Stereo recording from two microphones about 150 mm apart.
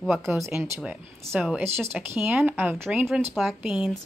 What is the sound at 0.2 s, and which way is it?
A woman's voice, 20° right (ahead or behind).